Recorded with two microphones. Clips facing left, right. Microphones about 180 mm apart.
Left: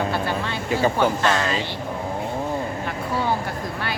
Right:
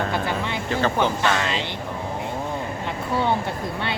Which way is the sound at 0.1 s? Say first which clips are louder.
Even; 15° right (ahead or behind).